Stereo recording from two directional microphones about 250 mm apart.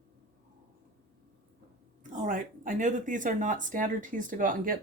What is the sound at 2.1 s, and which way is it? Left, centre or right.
Speech, right.